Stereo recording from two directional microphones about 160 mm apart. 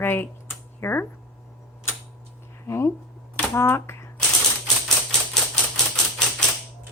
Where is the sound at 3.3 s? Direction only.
15° left (ahead or behind).